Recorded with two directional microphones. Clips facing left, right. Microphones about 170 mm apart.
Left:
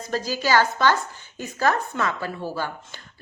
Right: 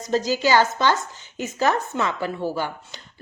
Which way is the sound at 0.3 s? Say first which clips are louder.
Right 1 dB; 20° right (ahead or behind).